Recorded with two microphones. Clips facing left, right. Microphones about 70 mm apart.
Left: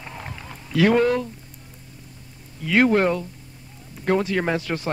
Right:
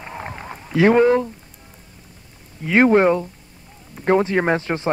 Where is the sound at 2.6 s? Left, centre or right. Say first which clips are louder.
Right 4 dB; right.